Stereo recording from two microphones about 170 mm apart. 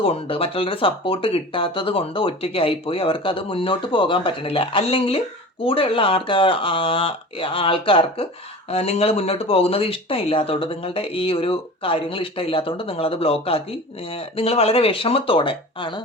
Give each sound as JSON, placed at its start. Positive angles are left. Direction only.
{"t": 0.0, "sound": "speech", "side_deg": 35}